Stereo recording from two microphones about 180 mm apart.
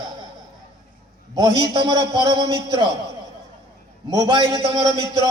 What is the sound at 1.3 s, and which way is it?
A man's voice, 20° right (ahead or behind).